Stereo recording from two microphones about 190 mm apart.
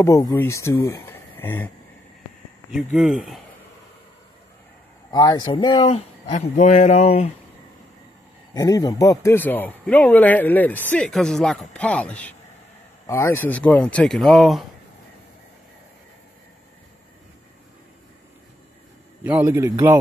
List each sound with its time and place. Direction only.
0.0 s speech: 15° left (ahead or behind)
0.8 s a sound: 15° left (ahead or behind)
2.7 s speech: centre (ahead or behind)
5.1 s speech: 20° left (ahead or behind)
8.5 s speech: 20° left (ahead or behind); by 14.7 s centre (ahead or behind)
19.2 s a man's voice: 10° right (ahead or behind)